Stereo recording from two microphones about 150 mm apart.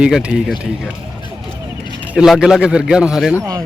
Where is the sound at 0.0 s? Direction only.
5° right (ahead or behind).